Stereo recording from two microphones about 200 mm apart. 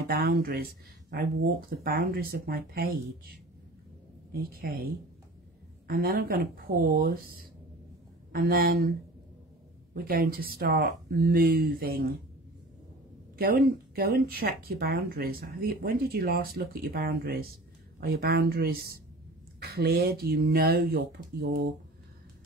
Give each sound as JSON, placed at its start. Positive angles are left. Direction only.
{"t": 0.1, "sound": "speech", "side_deg": -50}
{"t": 10.0, "sound": "speech", "side_deg": -45}
{"t": 13.4, "sound": "speech", "side_deg": -50}